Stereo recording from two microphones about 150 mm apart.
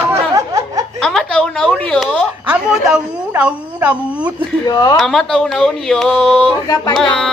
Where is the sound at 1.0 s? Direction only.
5° left (ahead or behind).